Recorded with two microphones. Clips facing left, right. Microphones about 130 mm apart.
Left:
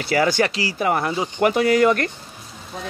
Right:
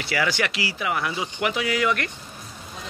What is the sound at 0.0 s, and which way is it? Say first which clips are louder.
Speech: left 6 dB; 40° left (ahead or behind).